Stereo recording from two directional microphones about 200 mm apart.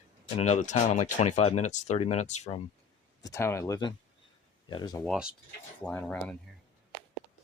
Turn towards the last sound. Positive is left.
turn(degrees=5)  # may be behind; listen again after turning